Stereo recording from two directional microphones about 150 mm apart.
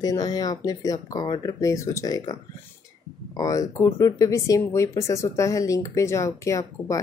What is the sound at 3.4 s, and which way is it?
Speech, 20° left (ahead or behind).